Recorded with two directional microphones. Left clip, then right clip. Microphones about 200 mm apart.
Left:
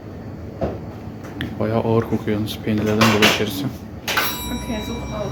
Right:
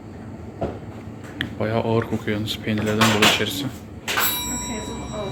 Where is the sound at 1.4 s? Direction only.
5° left (ahead or behind).